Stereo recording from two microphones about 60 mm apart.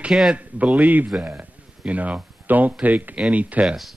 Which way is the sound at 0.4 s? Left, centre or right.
Right.